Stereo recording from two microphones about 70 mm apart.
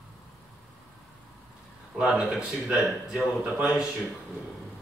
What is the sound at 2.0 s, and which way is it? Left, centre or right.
Speech, centre.